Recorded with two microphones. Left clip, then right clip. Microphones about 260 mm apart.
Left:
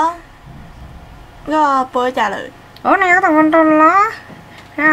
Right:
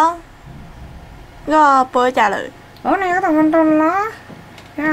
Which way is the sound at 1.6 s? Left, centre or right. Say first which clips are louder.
Right 2 dB; centre.